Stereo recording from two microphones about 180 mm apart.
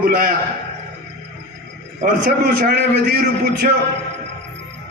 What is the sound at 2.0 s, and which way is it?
A man's voice, 55° right (ahead or behind).